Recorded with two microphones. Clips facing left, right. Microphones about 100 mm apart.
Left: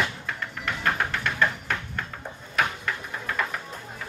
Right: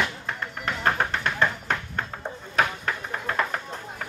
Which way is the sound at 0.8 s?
40° right (ahead or behind).